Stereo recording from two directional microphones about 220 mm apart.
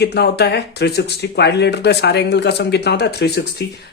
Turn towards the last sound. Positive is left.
turn(degrees=50)  # may be behind; listen again after turning